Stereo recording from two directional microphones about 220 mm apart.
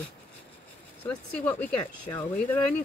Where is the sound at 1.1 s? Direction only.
10° left (ahead or behind).